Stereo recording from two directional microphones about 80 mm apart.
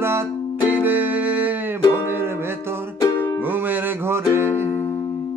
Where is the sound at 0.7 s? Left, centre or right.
Right.